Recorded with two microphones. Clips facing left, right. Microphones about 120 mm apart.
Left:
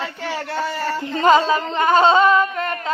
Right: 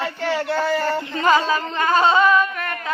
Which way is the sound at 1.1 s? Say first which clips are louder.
Left 4 dB; 25° left (ahead or behind).